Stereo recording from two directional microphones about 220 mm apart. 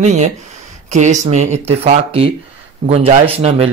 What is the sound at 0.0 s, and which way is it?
A man's voice, 30° right (ahead or behind).